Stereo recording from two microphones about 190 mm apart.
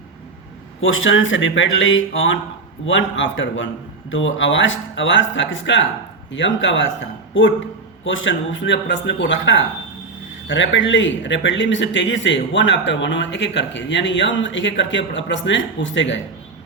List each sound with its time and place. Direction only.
0.8 s a man's voice: 90° left; by 16.2 s 75° left (ahead or behind)